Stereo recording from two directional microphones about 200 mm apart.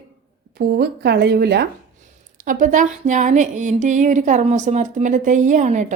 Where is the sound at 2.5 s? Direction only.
40° right (ahead or behind).